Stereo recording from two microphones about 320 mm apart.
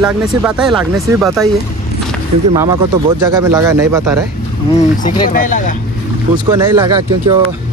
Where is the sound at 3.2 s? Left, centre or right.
Centre.